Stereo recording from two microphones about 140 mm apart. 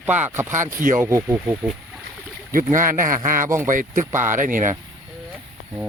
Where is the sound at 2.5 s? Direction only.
70° right (ahead or behind).